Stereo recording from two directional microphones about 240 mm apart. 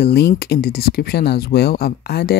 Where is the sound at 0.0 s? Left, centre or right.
Left.